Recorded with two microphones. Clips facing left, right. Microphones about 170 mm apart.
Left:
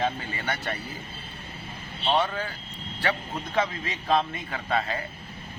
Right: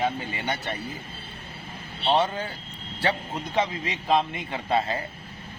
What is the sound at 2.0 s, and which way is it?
A man's voice, 25° right (ahead or behind).